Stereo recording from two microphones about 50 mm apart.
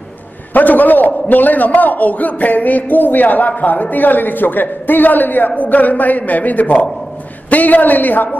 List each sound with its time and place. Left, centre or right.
0.5 s a man's voice: left